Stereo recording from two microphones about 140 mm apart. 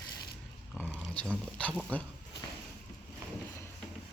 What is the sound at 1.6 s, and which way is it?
Speech, 10° left (ahead or behind).